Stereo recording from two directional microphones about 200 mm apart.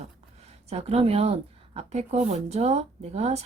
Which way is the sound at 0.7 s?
30° right (ahead or behind).